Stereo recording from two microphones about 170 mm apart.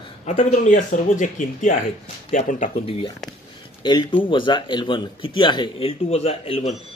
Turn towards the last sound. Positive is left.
turn(degrees=40)  # may be behind; listen again after turning